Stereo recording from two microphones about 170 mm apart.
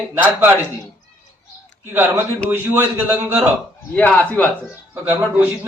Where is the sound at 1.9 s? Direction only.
10° right (ahead or behind).